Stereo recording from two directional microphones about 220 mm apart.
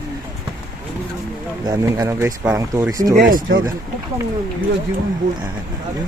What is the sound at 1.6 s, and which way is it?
Speech, 15° right (ahead or behind).